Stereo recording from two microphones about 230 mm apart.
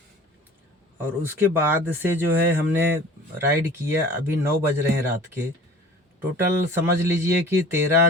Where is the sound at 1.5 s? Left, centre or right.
Centre.